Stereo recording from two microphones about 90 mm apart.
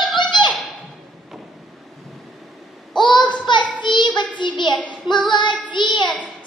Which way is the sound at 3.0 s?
60° left (ahead or behind).